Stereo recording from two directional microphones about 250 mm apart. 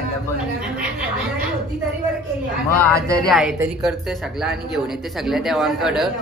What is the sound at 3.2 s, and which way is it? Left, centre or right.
A woman's voice, centre.